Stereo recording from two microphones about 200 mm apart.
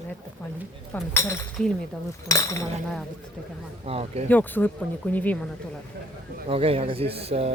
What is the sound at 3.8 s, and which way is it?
Speech, 30° right (ahead or behind).